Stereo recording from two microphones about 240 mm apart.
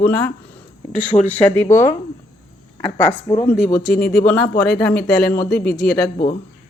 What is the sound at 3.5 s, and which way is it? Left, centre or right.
Speech, left.